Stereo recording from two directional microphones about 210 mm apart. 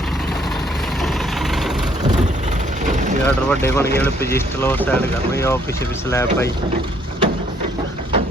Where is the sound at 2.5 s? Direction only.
35° right (ahead or behind).